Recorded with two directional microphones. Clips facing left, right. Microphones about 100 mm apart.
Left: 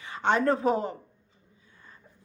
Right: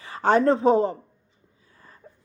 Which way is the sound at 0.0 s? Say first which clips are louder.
Right 5 dB; 35° right (ahead or behind).